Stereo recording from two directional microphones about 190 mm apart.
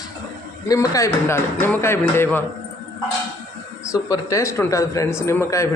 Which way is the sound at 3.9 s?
15° left (ahead or behind).